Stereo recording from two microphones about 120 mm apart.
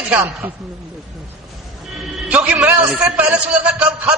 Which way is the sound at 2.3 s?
10° right (ahead or behind).